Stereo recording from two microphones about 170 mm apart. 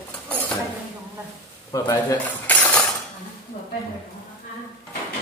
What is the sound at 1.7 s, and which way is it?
Speech, 20° left (ahead or behind).